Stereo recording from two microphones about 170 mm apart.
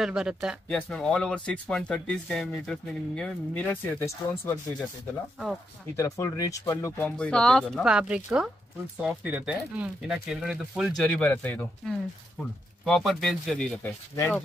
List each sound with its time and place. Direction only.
0.0 s speech: 5° right (ahead or behind); by 4.6 s 10° left (ahead or behind)
5.9 s speech: 15° left (ahead or behind)
7.0 s speech: 5° left (ahead or behind)
11.0 s speech: 10° left (ahead or behind)
14.1 s speech: 15° left (ahead or behind)